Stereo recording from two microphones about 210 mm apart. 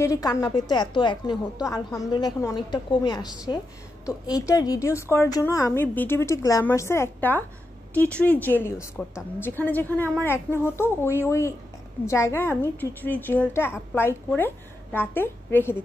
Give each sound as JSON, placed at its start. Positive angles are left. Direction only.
{"t": 0.0, "sound": "a woman's voice", "side_deg": 15}